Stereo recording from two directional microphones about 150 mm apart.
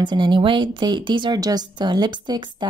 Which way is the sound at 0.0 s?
30° right (ahead or behind).